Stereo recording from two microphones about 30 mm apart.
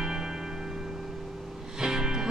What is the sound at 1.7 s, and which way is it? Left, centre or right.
Music, right.